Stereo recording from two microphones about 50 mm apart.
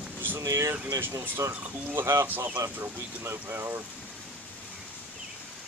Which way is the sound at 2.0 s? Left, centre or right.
Right.